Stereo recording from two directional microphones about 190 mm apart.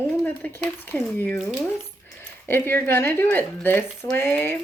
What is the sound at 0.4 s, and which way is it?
Speech, 5° left (ahead or behind).